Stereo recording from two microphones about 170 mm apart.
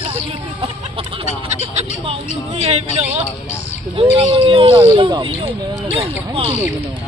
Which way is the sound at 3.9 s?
35° right (ahead or behind).